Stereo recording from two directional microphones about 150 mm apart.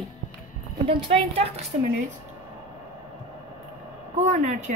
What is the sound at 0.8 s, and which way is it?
Speech, 40° right (ahead or behind).